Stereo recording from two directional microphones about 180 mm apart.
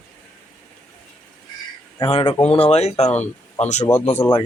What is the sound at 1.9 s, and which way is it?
A man's voice, 30° left (ahead or behind).